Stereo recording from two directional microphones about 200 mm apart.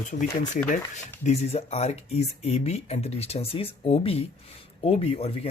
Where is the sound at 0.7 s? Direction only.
35° left (ahead or behind).